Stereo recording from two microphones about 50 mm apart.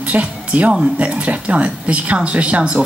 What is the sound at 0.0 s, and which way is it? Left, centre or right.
A woman's voice, right.